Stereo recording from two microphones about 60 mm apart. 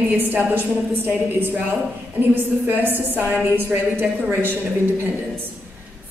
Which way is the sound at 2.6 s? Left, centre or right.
Right.